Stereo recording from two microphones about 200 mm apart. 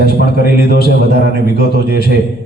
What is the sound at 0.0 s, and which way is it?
A man's voice, 50° left (ahead or behind).